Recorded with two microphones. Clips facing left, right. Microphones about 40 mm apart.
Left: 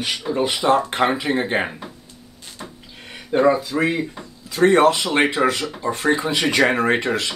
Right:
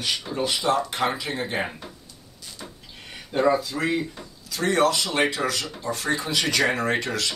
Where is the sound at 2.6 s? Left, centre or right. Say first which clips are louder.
Left 5 dB; centre.